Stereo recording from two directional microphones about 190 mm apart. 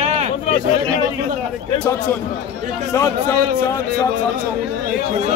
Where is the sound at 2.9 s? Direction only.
15° left (ahead or behind).